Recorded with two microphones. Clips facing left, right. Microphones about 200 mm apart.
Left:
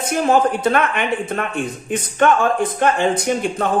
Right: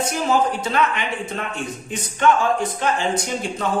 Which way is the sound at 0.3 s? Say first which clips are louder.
Left 6 dB; 55° left (ahead or behind).